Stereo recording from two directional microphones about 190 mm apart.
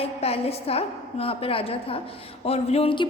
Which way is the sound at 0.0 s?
30° left (ahead or behind).